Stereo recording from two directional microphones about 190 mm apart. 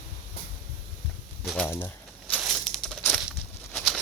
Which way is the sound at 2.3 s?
Centre (ahead or behind).